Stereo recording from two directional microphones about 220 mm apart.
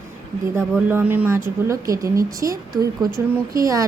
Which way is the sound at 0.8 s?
10° right (ahead or behind).